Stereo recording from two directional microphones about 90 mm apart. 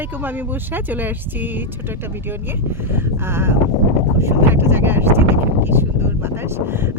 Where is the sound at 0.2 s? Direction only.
20° right (ahead or behind).